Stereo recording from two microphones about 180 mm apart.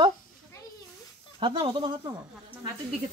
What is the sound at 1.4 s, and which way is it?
Speech, 25° right (ahead or behind).